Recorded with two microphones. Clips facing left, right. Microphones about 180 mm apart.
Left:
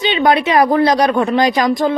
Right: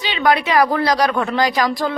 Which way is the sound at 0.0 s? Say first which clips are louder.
Left 4 dB; 20° left (ahead or behind).